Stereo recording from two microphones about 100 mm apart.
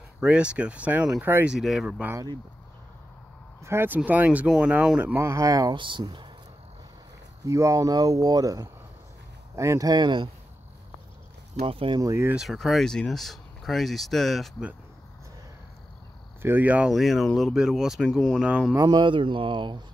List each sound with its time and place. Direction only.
0.2 s speech: 10° right (ahead or behind)
1.5 s speech: centre (ahead or behind)
3.6 s speech: 25° right (ahead or behind)
5.2 s speech: 30° right (ahead or behind)
5.8 s speech: 55° right (ahead or behind)
7.4 s speech: 30° right (ahead or behind); by 10.3 s 50° right (ahead or behind)
11.6 s speech: 60° right (ahead or behind)
12.0 s speech: 30° right (ahead or behind)
12.4 s speech: centre (ahead or behind)
16.4 s speech: 15° right (ahead or behind)
16.9 s speech: centre (ahead or behind)
18.8 s speech: 50° right (ahead or behind)